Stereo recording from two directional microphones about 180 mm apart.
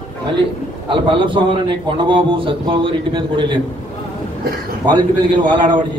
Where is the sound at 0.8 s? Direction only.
25° right (ahead or behind).